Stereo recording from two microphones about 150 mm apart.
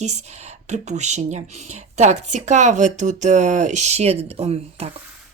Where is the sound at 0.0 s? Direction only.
50° right (ahead or behind).